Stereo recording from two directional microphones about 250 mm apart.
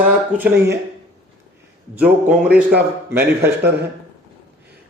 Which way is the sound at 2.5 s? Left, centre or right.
Centre.